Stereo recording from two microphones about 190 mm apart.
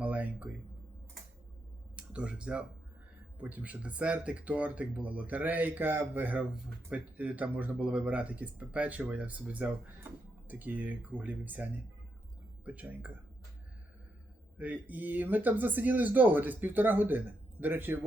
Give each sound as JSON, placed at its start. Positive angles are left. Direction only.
{"t": 0.0, "sound": "a sound", "side_deg": -10}
{"t": 2.0, "sound": "speech", "side_deg": -5}
{"t": 14.6, "sound": "speech", "side_deg": -10}